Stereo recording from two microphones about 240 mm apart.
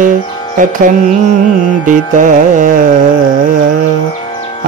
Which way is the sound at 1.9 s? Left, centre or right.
Right.